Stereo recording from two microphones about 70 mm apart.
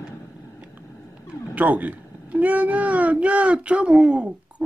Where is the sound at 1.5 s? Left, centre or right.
Right.